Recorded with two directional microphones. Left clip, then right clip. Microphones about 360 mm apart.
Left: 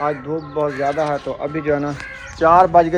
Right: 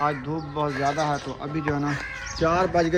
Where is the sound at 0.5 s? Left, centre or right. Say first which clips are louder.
Left 5 dB; centre.